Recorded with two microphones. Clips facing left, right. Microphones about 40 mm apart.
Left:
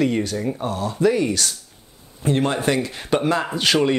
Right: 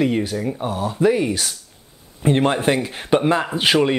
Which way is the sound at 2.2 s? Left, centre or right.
Right.